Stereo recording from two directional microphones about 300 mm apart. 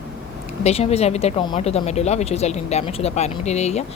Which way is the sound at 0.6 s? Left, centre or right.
Left.